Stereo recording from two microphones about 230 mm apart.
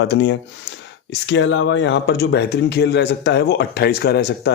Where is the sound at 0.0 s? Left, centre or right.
Left.